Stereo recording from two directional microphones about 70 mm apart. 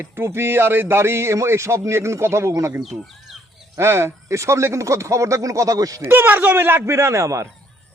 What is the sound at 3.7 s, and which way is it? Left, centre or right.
A man's voice, right.